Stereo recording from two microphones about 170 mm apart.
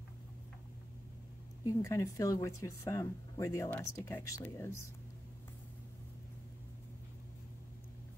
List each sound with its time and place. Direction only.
1.7 s speech: 20° left (ahead or behind)